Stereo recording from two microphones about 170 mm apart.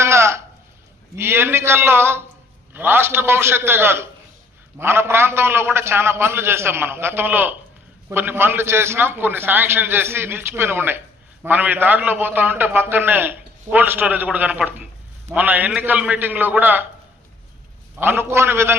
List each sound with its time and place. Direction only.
0.0 s a sound: 15° right (ahead or behind)
1.1 s a man's voice: 15° right (ahead or behind)
18.0 s a man's voice: 15° right (ahead or behind)